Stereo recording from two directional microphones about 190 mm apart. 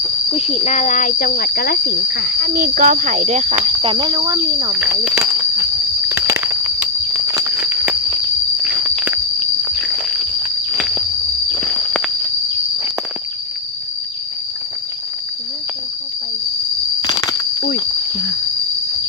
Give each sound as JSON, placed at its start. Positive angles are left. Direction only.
{"t": 0.3, "sound": "insect", "side_deg": 30}
{"t": 2.4, "sound": "speech", "side_deg": -45}
{"t": 3.6, "sound": "speech", "side_deg": -25}
{"t": 4.7, "sound": "speech", "side_deg": -5}
{"t": 5.2, "sound": "a sound", "side_deg": -15}
{"t": 8.6, "sound": "walk", "side_deg": -5}
{"t": 10.8, "sound": "walk", "side_deg": 0}
{"t": 17.0, "sound": "a sound", "side_deg": 20}